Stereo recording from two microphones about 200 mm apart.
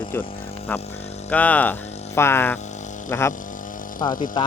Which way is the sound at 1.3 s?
5° left (ahead or behind).